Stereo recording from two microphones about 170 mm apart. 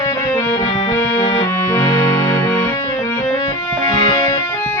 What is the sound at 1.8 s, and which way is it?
Music, 15° left (ahead or behind).